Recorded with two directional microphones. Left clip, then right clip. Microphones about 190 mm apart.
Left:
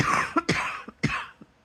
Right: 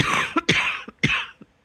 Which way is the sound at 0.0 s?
25° right (ahead or behind).